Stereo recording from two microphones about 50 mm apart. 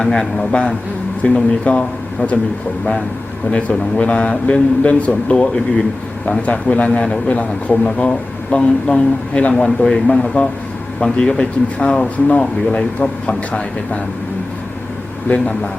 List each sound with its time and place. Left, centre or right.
0.0 s speech: centre
1.2 s a man's voice: left
2.2 s a man's voice: left
3.5 s a man's voice: left
5.4 s speech: centre
6.4 s a man's voice: left
9.6 s speech: centre
10.1 s a man's voice: centre
15.3 s a man's voice: left